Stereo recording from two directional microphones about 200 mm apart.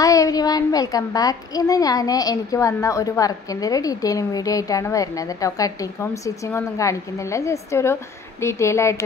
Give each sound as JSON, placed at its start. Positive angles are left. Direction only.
{"t": 0.0, "sound": "a child's voice", "side_deg": 15}